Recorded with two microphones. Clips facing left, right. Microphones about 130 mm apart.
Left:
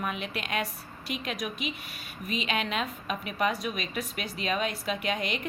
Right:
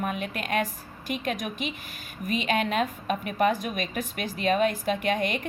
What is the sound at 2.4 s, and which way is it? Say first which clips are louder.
A woman's voice: right 5 dB; 45° right (ahead or behind).